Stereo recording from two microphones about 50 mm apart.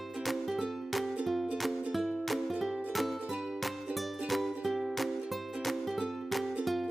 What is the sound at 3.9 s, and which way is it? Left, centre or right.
Music, centre.